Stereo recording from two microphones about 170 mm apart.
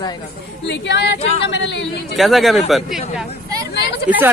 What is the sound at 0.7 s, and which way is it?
A woman's voice, 90° left.